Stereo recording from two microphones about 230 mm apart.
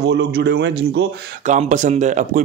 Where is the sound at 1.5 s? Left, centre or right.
Right.